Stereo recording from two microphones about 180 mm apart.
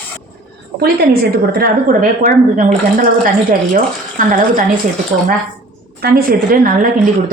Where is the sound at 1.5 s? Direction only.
55° right (ahead or behind).